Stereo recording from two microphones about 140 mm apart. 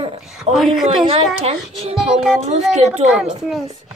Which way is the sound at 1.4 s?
45° right (ahead or behind).